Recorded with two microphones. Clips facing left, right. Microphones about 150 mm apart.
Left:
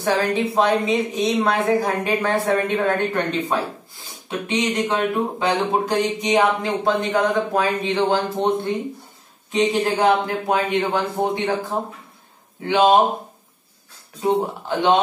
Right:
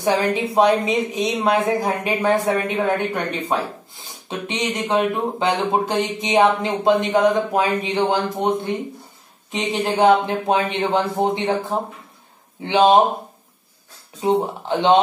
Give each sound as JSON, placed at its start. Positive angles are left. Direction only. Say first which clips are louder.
{"t": 0.0, "sound": "a woman's voice", "louder": "right 1 dB", "side_deg": -15}
{"t": 12.6, "sound": "speech", "louder": "right 1 dB", "side_deg": -20}
{"t": 14.2, "sound": "speech", "louder": "right 1 dB", "side_deg": -25}